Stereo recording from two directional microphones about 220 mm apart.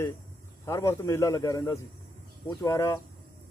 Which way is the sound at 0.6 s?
10° left (ahead or behind).